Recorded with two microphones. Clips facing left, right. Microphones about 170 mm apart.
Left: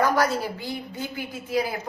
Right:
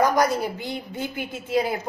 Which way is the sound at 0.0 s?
15° right (ahead or behind).